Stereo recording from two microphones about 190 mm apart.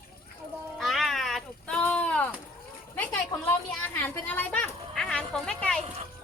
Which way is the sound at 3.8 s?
10° left (ahead or behind).